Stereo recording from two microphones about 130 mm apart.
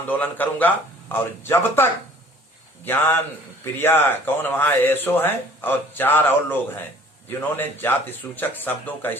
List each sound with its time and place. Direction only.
0.1 s a man's voice: 15° left (ahead or behind)